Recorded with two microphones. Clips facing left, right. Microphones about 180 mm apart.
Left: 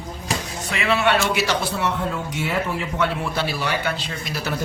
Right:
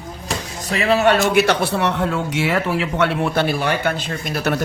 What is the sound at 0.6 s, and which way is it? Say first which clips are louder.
A man's voice: right 6 dB; 35° right (ahead or behind).